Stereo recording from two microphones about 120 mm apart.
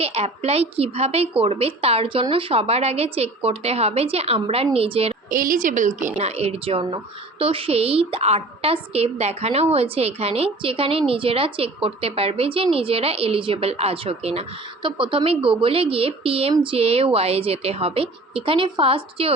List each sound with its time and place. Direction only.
0.0 s a woman's voice: 60° right (ahead or behind)
5.5 s a woman's voice: 90° right; by 19.3 s 50° right (ahead or behind)